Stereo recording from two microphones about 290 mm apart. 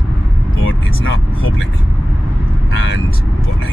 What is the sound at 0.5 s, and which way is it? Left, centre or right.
Speech, left.